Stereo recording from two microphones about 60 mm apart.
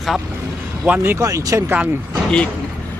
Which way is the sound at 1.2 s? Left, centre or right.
Right.